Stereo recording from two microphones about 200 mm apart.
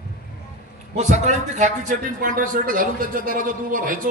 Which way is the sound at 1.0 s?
35° right (ahead or behind).